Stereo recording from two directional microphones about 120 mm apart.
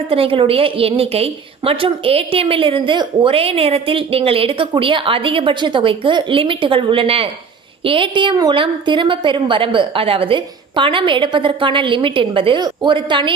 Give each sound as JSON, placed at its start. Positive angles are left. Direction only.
{"t": 0.1, "sound": "a woman's voice", "side_deg": -50}
{"t": 3.3, "sound": "a woman's voice", "side_deg": -55}